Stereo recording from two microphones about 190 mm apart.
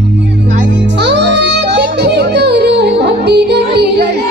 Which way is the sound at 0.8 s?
65° right (ahead or behind).